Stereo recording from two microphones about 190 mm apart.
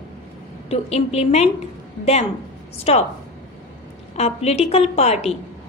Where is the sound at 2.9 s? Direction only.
35° left (ahead or behind).